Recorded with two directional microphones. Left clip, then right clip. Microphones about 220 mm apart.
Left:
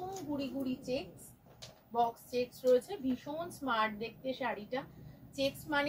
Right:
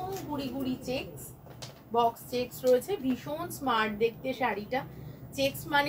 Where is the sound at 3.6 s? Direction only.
15° right (ahead or behind).